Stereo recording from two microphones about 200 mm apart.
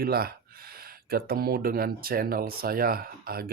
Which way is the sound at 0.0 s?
50° right (ahead or behind).